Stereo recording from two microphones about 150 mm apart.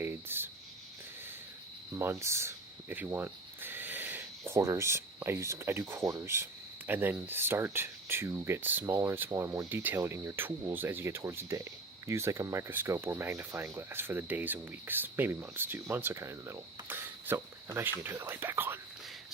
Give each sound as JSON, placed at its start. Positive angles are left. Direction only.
{"t": 0.0, "sound": "speech", "side_deg": -15}
{"t": 1.9, "sound": "speech", "side_deg": -15}